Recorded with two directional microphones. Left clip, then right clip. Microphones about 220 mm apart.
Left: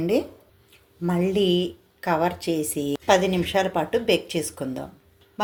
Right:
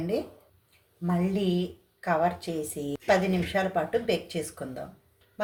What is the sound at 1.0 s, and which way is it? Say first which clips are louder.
A woman's voice: left 7 dB; 30° left (ahead or behind).